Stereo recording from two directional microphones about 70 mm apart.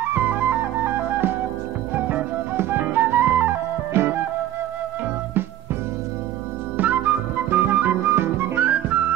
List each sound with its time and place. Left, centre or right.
0.1 s flute: right
2.0 s music: right
3.9 s music: right
6.8 s music: right